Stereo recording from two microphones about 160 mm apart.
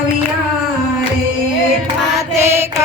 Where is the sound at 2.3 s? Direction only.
15° right (ahead or behind).